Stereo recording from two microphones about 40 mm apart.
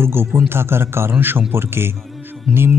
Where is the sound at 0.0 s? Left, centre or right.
Right.